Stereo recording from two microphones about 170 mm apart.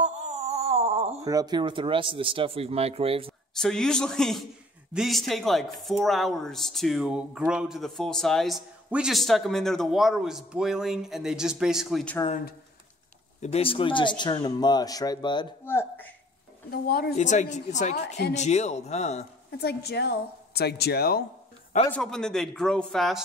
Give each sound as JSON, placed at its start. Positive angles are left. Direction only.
{"t": 0.0, "sound": "a sound", "side_deg": -40}
{"t": 1.2, "sound": "speech", "side_deg": -20}
{"t": 3.5, "sound": "speech", "side_deg": 5}
{"t": 12.3, "sound": "a woman's voice", "side_deg": 55}
{"t": 13.4, "sound": "speech", "side_deg": 35}
{"t": 15.6, "sound": "speech", "side_deg": 15}
{"t": 16.7, "sound": "a woman's voice", "side_deg": 65}
{"t": 17.2, "sound": "a woman's voice", "side_deg": 45}
{"t": 19.6, "sound": "a woman's voice", "side_deg": 75}
{"t": 21.9, "sound": "speech", "side_deg": 5}